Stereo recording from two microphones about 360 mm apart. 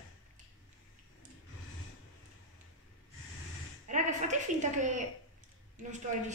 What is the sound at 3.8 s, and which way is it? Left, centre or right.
A woman's voice, centre.